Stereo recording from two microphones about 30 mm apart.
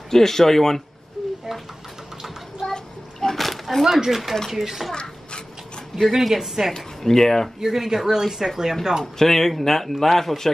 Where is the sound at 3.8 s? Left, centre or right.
Centre.